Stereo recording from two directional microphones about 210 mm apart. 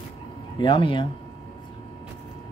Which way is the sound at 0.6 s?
25° left (ahead or behind).